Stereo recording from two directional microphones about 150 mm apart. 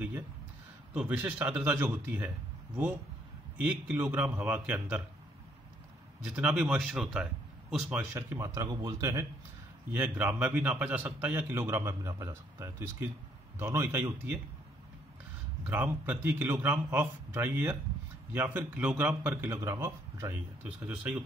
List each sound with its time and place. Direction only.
0.9 s a man's voice: 10° right (ahead or behind)
6.2 s speech: 10° right (ahead or behind)
7.9 s speech: 15° right (ahead or behind)
9.9 s a man's voice: 10° right (ahead or behind)
15.6 s a man's voice: 10° right (ahead or behind)